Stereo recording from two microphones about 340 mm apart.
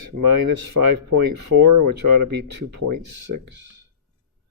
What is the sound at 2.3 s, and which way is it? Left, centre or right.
Speech, right.